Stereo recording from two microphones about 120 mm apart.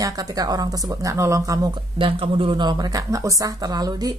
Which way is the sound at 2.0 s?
45° right (ahead or behind).